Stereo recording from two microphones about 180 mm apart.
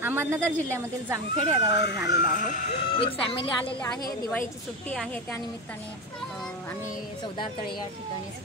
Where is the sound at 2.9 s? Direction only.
30° left (ahead or behind).